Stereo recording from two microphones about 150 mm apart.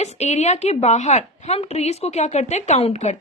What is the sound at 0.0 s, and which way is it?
A woman's voice, 50° left (ahead or behind).